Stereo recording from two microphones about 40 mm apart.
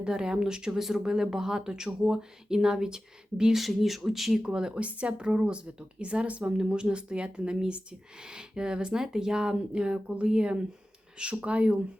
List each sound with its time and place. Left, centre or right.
0.0 s speech: centre
3.5 s speech: centre
4.4 s speech: centre
4.8 s speech: right